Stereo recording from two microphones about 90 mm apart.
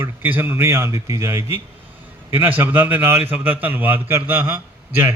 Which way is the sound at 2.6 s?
20° right (ahead or behind).